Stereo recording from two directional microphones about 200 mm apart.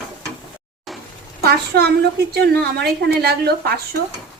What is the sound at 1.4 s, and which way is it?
A woman's voice, 55° right (ahead or behind).